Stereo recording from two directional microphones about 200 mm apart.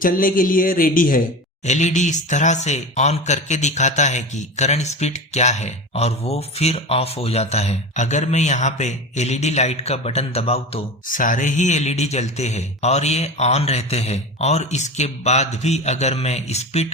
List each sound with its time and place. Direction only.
0.0 s speech: 45° left (ahead or behind)
11.1 s speech: 40° left (ahead or behind)